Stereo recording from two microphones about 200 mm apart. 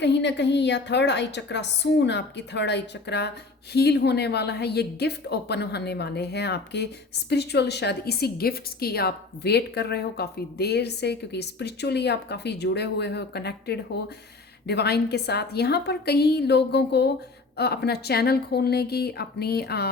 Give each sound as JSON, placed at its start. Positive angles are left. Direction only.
{"t": 0.0, "sound": "a woman's voice", "side_deg": 60}